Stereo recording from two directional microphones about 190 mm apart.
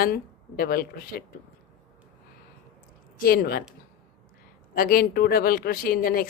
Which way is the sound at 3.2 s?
50° left (ahead or behind).